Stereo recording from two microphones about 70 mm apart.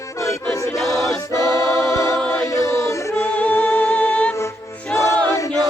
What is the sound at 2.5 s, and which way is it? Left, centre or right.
Music, left.